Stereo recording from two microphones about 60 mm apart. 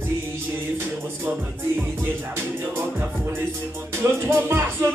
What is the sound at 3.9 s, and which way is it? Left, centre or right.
Music, right.